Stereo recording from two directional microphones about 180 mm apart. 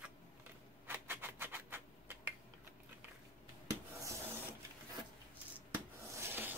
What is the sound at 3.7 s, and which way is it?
Rub, 20° right (ahead or behind).